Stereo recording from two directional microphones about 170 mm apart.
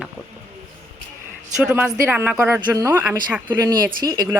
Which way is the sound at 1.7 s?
10° right (ahead or behind).